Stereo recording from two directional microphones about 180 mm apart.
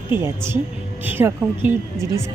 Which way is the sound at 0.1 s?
15° right (ahead or behind).